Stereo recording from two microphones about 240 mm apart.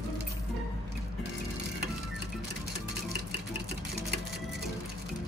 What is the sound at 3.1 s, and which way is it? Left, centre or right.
Stir, right.